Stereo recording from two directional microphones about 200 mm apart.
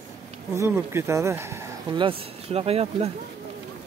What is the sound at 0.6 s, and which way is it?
Speech, 15° right (ahead or behind).